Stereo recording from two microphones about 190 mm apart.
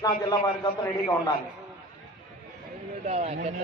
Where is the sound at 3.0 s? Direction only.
35° right (ahead or behind).